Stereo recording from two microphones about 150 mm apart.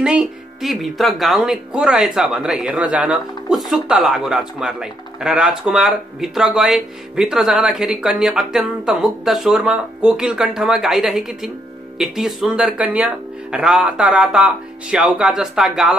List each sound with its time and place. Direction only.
0.0 s a woman's voice: 5° right (ahead or behind)